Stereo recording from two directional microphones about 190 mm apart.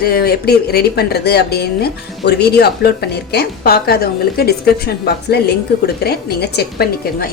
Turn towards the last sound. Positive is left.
turn(degrees=55)  # may be behind; listen again after turning